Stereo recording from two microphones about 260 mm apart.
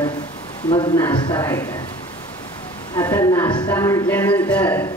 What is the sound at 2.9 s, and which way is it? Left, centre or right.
A woman's voice, centre.